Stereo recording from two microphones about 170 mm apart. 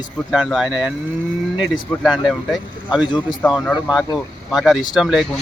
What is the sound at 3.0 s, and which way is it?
Speech, 25° left (ahead or behind).